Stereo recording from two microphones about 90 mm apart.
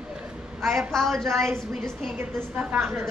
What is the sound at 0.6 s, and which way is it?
Speech, centre (ahead or behind).